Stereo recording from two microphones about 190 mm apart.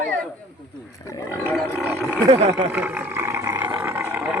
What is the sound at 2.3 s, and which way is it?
Speech, 35° right (ahead or behind).